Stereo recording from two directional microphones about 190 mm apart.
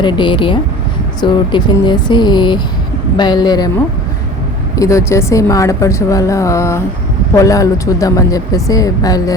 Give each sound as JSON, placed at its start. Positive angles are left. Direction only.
{"t": 0.0, "sound": "speech", "side_deg": 25}
{"t": 4.8, "sound": "speech", "side_deg": 15}